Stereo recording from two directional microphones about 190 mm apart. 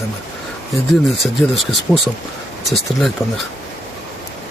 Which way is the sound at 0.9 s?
Centre (ahead or behind).